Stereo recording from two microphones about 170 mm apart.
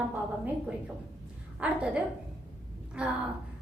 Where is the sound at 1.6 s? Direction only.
5° right (ahead or behind).